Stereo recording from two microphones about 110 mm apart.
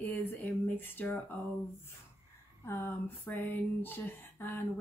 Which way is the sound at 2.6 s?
20° left (ahead or behind).